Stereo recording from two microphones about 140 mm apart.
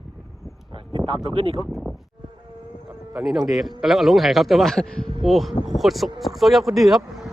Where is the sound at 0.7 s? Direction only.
40° right (ahead or behind).